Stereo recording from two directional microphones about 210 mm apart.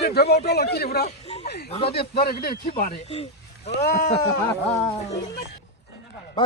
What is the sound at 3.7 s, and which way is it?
Speech, 45° left (ahead or behind).